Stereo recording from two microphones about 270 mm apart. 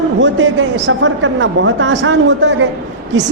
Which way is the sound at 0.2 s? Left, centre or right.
Right.